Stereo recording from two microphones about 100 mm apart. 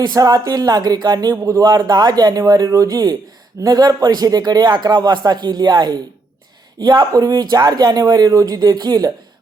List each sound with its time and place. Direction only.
0.0 s speech: 40° right (ahead or behind)